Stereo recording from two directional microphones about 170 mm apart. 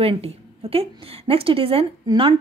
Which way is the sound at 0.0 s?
35° right (ahead or behind).